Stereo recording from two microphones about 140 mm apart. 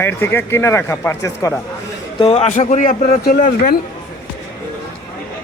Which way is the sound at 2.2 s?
50° left (ahead or behind).